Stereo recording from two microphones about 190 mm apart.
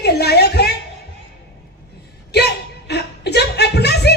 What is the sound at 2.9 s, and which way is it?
Chuckle, 60° left (ahead or behind).